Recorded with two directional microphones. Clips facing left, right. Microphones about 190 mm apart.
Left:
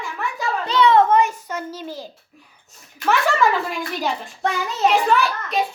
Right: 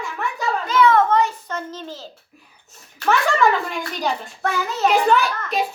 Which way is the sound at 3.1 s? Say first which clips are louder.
Right 1 dB; centre (ahead or behind).